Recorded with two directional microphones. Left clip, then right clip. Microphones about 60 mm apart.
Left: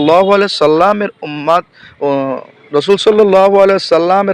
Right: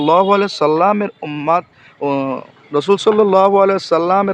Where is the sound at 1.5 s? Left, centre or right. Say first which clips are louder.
Left 4 dB; left.